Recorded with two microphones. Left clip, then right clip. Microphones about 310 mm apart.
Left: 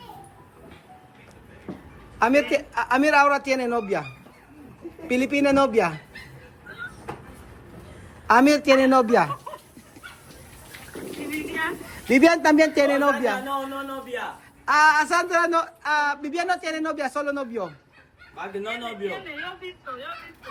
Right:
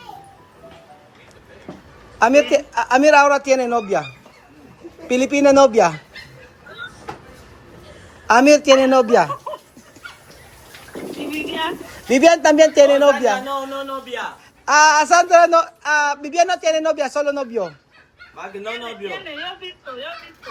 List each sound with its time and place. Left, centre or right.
2.1 s speech: centre
5.0 s speech: centre
8.3 s speech: centre
11.5 s a man's voice: centre
14.6 s speech: centre
19.0 s speech: centre